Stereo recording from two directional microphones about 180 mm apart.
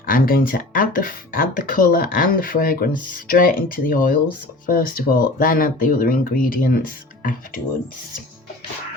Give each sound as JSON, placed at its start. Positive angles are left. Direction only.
{"t": 0.0, "sound": "speech", "side_deg": 55}